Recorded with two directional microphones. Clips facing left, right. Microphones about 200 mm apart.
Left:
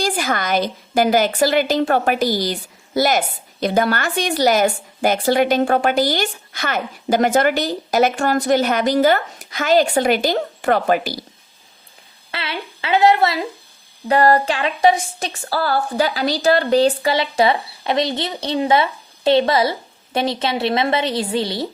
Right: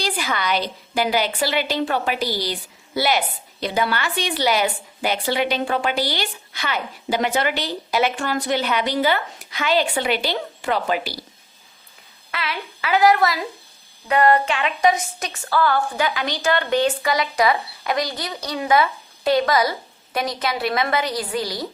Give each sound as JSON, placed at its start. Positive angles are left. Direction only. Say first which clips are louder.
{"t": 0.0, "sound": "a woman's voice", "louder": "left 4 dB", "side_deg": 45}
{"t": 12.3, "sound": "a woman's voice", "louder": "left 1 dB", "side_deg": 30}